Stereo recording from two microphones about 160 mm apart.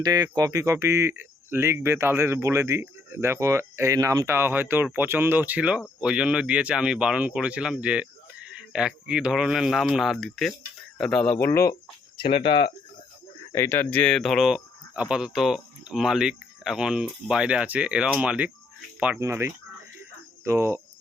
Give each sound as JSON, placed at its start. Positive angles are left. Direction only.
{"t": 0.0, "sound": "speech", "side_deg": -25}
{"t": 12.5, "sound": "speech", "side_deg": 30}
{"t": 13.5, "sound": "speech", "side_deg": 15}